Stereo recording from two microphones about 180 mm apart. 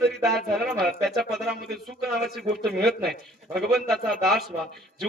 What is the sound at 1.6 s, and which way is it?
Speech, 60° right (ahead or behind).